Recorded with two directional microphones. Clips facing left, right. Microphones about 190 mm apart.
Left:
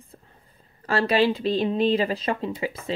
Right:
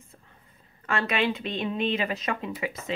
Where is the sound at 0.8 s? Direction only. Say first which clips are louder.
Left 6 dB; 35° left (ahead or behind).